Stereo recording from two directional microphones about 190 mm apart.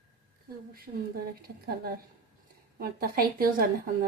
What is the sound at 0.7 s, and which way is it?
A woman's voice, 50° right (ahead or behind).